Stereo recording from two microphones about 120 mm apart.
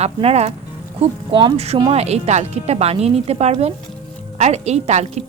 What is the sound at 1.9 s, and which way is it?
A woman's voice, 65° right (ahead or behind).